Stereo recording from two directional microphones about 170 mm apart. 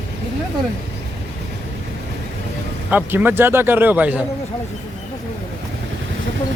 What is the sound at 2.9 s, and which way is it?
Speech, 10° right (ahead or behind).